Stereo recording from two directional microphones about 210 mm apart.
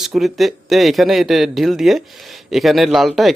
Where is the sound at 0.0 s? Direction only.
Centre (ahead or behind).